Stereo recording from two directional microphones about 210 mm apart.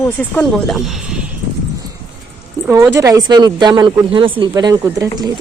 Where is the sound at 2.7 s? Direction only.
15° right (ahead or behind).